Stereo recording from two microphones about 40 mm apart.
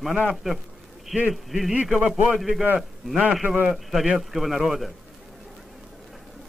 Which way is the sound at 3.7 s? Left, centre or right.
Centre.